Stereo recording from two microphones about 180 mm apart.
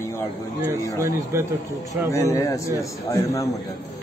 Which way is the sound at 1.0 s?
15° right (ahead or behind).